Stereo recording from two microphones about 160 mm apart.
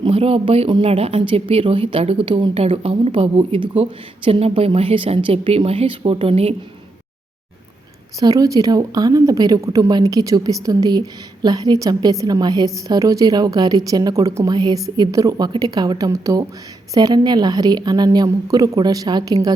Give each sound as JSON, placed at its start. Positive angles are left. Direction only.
{"t": 0.0, "sound": "a woman's voice", "side_deg": -35}
{"t": 8.2, "sound": "a woman's voice", "side_deg": -25}